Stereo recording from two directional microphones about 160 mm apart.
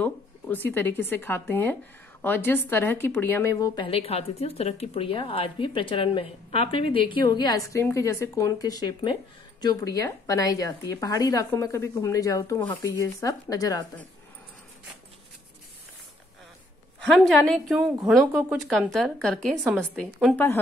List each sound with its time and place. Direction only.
0.0 s speech: 10° left (ahead or behind)
3.8 s a woman's voice: 35° left (ahead or behind)
17.0 s a woman's voice: centre (ahead or behind)